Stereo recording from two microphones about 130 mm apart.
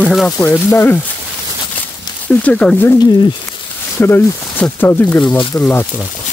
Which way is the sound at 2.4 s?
10° left (ahead or behind).